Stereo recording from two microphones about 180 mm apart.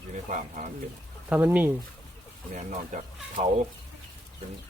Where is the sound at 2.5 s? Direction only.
45° right (ahead or behind).